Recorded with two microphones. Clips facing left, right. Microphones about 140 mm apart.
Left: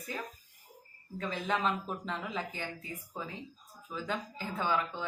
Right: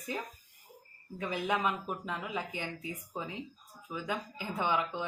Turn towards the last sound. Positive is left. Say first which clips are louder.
# right 1 dB
turn(degrees=-15)  # may be behind; listen again after turning